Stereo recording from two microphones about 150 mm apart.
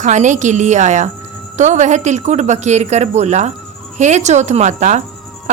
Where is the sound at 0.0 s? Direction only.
55° right (ahead or behind).